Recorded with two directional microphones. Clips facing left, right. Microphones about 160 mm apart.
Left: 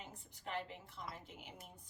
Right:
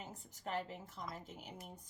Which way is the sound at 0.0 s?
40° right (ahead or behind).